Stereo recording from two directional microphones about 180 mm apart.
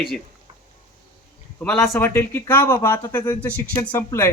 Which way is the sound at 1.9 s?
15° left (ahead or behind).